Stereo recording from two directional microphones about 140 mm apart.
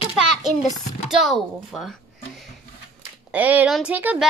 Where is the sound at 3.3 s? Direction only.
10° right (ahead or behind).